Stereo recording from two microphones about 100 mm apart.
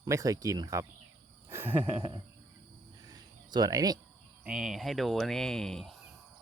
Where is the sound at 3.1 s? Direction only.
40° right (ahead or behind).